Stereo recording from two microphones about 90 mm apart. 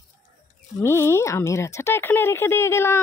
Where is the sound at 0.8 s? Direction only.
30° left (ahead or behind).